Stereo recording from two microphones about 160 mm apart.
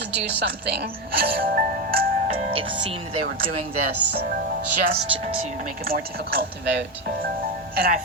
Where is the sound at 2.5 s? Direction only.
35° right (ahead or behind).